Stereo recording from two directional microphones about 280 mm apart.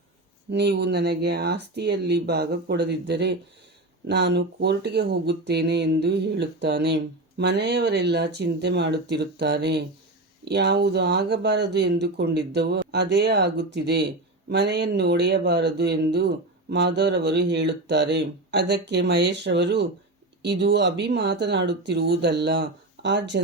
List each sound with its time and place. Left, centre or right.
0.5 s speech: right